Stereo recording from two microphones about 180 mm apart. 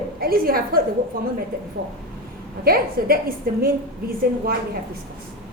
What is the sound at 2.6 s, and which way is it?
A woman's voice, 55° right (ahead or behind).